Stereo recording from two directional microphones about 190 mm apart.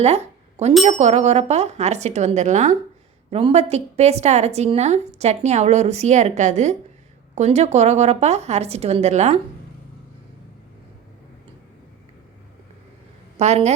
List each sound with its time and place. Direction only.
0.0 s bicycle bell: 35° right (ahead or behind)
0.9 s a woman's voice: 35° right (ahead or behind)
13.3 s a woman's voice: 35° right (ahead or behind)